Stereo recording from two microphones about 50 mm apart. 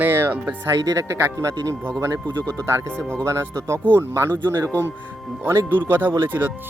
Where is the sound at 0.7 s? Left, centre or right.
Right.